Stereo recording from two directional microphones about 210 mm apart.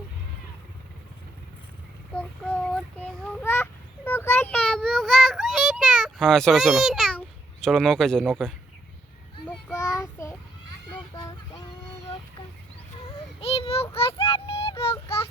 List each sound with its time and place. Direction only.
2.1 s child singing: 5° left (ahead or behind)
13.4 s child singing: 30° left (ahead or behind)